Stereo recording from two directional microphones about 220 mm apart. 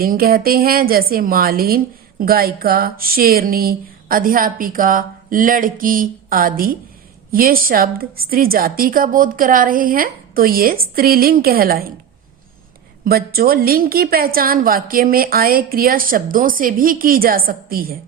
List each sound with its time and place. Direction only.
0.0 s a woman's voice: 40° right (ahead or behind)
13.1 s a woman's voice: 45° right (ahead or behind)